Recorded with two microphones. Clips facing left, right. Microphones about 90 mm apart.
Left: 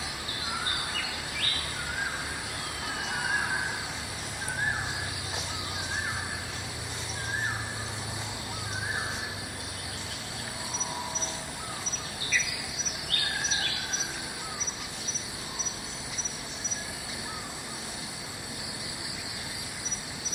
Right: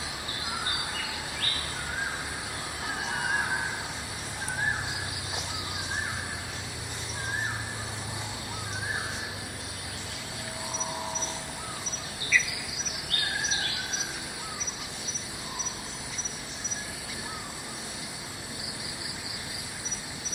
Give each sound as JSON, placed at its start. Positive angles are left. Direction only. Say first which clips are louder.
{"t": 12.3, "sound": "insect", "louder": "right 5 dB", "side_deg": 40}